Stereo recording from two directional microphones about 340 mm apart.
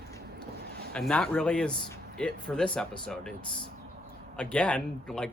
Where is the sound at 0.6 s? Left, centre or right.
Right.